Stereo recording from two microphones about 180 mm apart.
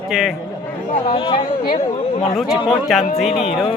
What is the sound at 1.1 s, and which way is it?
Speech, 30° left (ahead or behind).